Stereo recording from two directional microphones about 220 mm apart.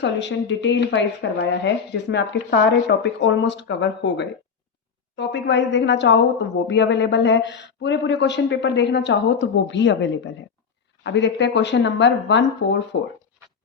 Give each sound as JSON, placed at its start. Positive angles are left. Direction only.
{"t": 0.0, "sound": "speech", "side_deg": 55}